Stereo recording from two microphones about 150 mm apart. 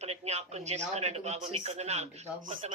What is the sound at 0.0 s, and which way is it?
Speech, 45° right (ahead or behind).